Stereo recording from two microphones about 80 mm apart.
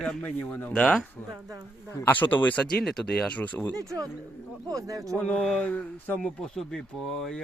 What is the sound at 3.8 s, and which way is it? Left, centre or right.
Speech, right.